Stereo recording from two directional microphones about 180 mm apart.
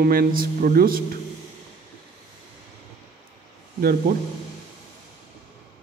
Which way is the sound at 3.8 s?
55° right (ahead or behind).